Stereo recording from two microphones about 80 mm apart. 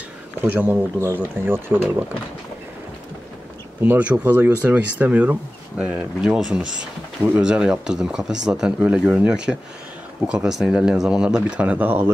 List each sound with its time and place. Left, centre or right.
0.4 s speech: right
3.8 s speech: right